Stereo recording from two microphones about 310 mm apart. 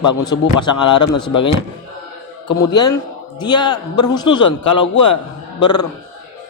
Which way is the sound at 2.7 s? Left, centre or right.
Centre.